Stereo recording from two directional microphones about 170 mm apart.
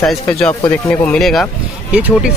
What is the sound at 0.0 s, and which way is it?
Speech, 5° left (ahead or behind).